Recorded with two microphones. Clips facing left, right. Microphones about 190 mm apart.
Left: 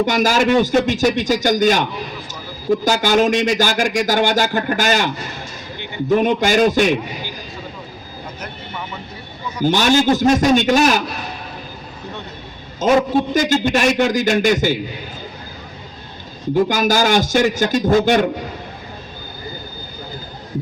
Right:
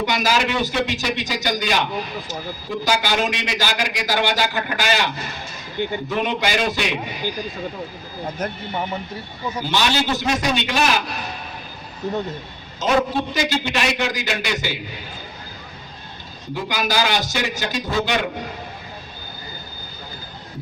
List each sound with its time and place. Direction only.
0.0 s speech: 45° left (ahead or behind)
8.4 s speech: 40° right (ahead or behind)
9.6 s speech: 45° left (ahead or behind)
12.8 s speech: 45° left (ahead or behind)
16.6 s speech: 45° left (ahead or behind)